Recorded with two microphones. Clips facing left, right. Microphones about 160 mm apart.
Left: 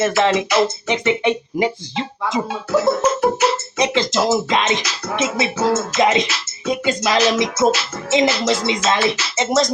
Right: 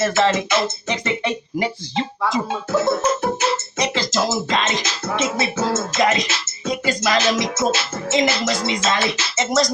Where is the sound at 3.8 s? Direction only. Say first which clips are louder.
Left 5 dB; 20° left (ahead or behind).